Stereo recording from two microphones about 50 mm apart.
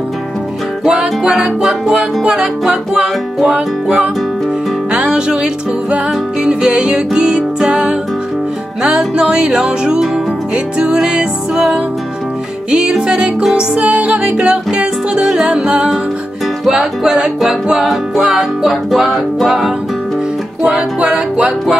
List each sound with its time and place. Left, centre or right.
0.8 s music: centre
4.9 s music: centre
13.0 s music: centre
15.2 s music: centre
15.5 s music: right
17.0 s music: centre
20.6 s music: right